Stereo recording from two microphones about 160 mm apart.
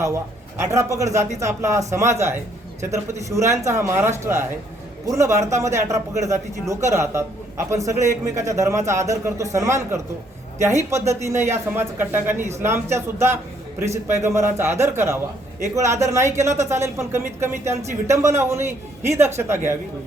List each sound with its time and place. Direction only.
0.6 s a man's voice: 20° right (ahead or behind)